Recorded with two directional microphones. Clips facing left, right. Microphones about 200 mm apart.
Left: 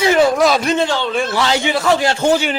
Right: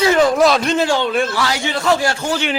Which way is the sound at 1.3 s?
20° left (ahead or behind).